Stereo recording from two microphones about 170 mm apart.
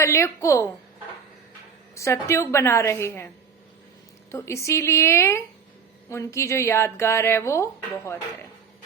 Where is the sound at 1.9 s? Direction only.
15° left (ahead or behind).